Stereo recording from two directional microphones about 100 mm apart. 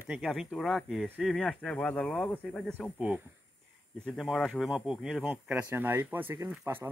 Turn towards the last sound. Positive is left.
turn(degrees=-25)  # may be behind; listen again after turning